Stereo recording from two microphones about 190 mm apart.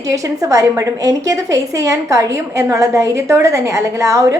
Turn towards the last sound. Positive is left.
turn(degrees=-15)  # may be behind; listen again after turning